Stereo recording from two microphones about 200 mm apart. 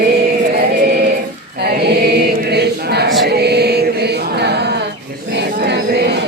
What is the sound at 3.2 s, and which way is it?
Chant, 55° right (ahead or behind).